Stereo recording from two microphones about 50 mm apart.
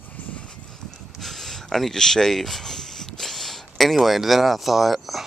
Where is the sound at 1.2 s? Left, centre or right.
Centre.